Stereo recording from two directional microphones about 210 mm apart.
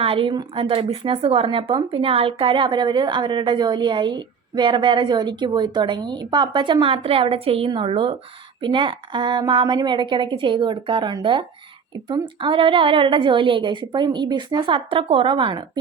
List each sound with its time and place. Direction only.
0.0 s speech: 25° right (ahead or behind)